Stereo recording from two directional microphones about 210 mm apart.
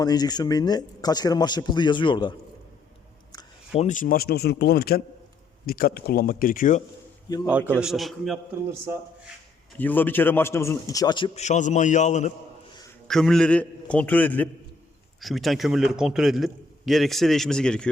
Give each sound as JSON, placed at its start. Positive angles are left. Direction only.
{"t": 0.0, "sound": "a man's voice", "side_deg": 20}
{"t": 3.8, "sound": "speech", "side_deg": 35}
{"t": 7.8, "sound": "a man's voice", "side_deg": 0}
{"t": 8.7, "sound": "speech", "side_deg": -10}
{"t": 9.7, "sound": "a man's voice", "side_deg": 10}
{"t": 11.4, "sound": "a man's voice", "side_deg": 35}
{"t": 13.1, "sound": "a man's voice", "side_deg": 0}